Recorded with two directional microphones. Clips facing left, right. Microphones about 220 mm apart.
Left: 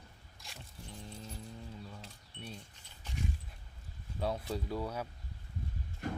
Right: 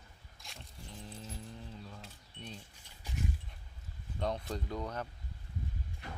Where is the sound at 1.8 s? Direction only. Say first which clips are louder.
Left 1 dB; 5° left (ahead or behind).